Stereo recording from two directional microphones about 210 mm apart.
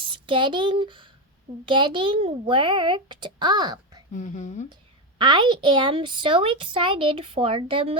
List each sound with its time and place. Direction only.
0.0 s a woman's voice: 25° right (ahead or behind)
4.1 s speech: 35° left (ahead or behind)
5.1 s a woman's voice: 20° right (ahead or behind)